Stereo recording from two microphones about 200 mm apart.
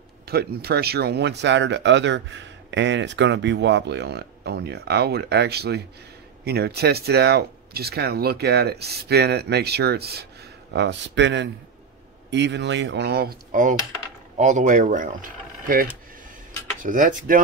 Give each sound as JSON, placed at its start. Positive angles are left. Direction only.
{"t": 0.3, "sound": "speech", "side_deg": -50}